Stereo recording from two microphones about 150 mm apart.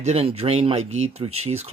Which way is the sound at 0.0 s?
45° right (ahead or behind).